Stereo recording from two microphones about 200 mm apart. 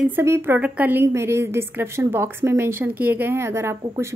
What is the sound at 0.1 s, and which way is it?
A woman's voice, 10° right (ahead or behind).